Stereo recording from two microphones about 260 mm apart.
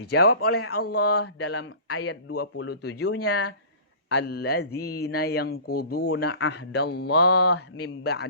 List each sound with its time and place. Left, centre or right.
0.0 s speech: left
0.5 s speech: left
1.2 s speech: left
3.0 s speech: left
4.1 s speech: left
7.3 s speech: left
7.8 s speech: left